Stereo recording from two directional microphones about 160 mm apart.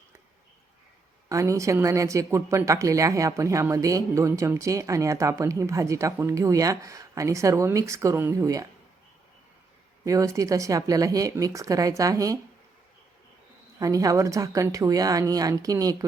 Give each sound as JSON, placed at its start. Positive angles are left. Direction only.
{"t": 1.3, "sound": "a woman's voice", "side_deg": -20}
{"t": 10.0, "sound": "a woman's voice", "side_deg": -20}
{"t": 13.7, "sound": "a woman's voice", "side_deg": -20}